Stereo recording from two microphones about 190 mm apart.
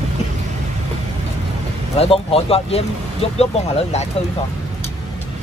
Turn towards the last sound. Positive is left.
turn(degrees=35)  # may be behind; listen again after turning